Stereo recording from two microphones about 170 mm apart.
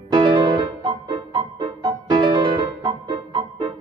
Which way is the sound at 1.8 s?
25° right (ahead or behind).